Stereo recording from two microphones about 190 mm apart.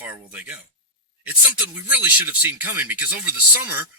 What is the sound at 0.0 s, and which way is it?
Speech, 10° right (ahead or behind).